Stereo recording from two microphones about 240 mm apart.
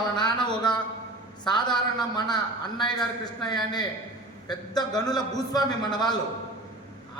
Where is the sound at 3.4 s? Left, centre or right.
Centre.